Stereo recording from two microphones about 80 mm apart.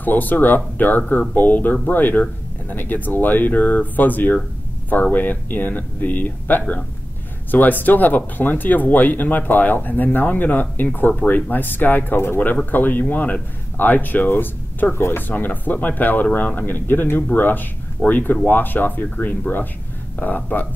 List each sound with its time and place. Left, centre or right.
0.0 s speech: left